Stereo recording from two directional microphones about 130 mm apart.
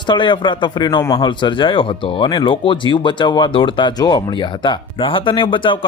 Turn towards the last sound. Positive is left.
turn(degrees=40)  # may be behind; listen again after turning